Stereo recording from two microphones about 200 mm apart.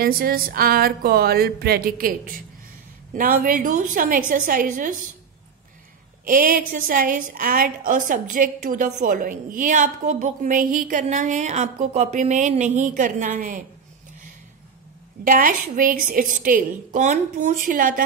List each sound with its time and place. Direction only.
0.0 s a woman's voice: 45° right (ahead or behind)
6.2 s a woman's voice: 45° right (ahead or behind)
15.2 s a woman's voice: 45° right (ahead or behind)